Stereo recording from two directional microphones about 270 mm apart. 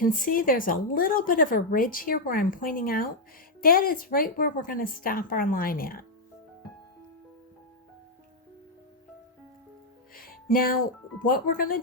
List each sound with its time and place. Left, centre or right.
0.0 s speech: left
10.2 s music: left
11.3 s speech: left